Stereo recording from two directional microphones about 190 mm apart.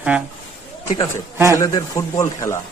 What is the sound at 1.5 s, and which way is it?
A man's voice, 15° left (ahead or behind).